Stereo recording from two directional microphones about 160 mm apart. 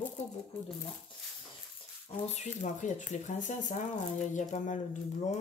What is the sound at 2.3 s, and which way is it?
Speech, 50° left (ahead or behind).